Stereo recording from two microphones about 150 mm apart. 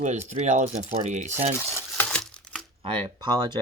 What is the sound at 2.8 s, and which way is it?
Speech, 35° right (ahead or behind).